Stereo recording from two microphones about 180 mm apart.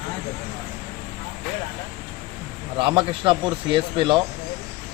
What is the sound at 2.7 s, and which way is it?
Speech, 25° right (ahead or behind).